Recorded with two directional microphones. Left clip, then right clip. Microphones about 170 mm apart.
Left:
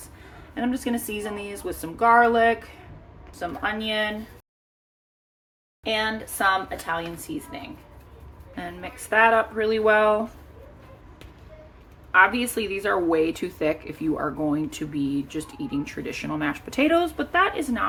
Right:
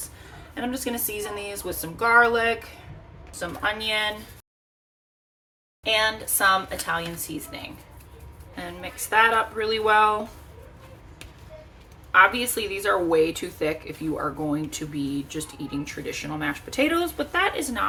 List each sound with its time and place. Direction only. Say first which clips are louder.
0.5 s speech: left 2 dB; 15° left (ahead or behind)
5.8 s speech: right 3 dB; 10° left (ahead or behind)
8.5 s a woman's voice: even; 20° left (ahead or behind)
12.1 s a woman's voice: even; 15° left (ahead or behind)